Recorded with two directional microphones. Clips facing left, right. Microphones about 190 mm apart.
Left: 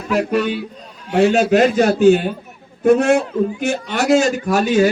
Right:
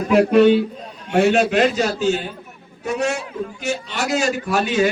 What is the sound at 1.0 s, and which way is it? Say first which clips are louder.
Speech: left 2 dB; 40° left (ahead or behind).